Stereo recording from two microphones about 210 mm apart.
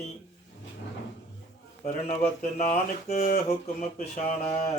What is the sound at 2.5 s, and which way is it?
Speech, 35° left (ahead or behind).